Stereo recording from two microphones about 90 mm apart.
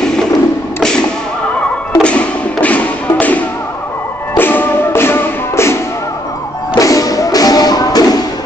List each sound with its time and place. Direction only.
2.0 s thump: 15° left (ahead or behind)
4.4 s music: 20° left (ahead or behind)
6.8 s music: 40° left (ahead or behind)